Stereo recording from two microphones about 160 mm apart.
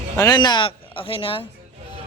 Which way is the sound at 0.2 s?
25° left (ahead or behind).